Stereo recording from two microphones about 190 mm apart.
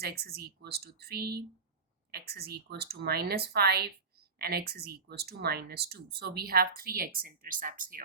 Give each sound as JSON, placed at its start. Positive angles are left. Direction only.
{"t": 0.0, "sound": "speech", "side_deg": -55}